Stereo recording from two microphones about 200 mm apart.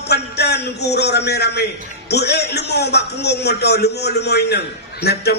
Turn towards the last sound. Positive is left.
turn(degrees=55)  # may be behind; listen again after turning